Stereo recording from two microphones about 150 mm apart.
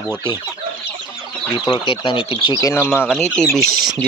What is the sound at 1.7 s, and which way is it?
Speech, 35° left (ahead or behind).